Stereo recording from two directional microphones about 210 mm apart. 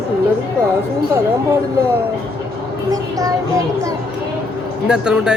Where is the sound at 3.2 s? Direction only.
15° right (ahead or behind).